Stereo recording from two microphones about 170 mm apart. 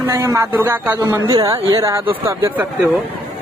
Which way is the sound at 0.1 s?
15° right (ahead or behind).